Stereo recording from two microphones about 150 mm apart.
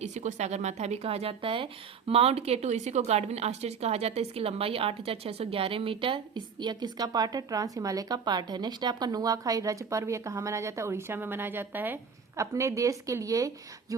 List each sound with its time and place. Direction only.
0.0 s a woman's voice: 50° right (ahead or behind); by 13.5 s 20° right (ahead or behind)